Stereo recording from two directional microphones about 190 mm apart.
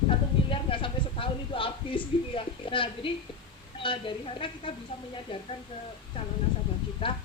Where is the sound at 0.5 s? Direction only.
25° left (ahead or behind).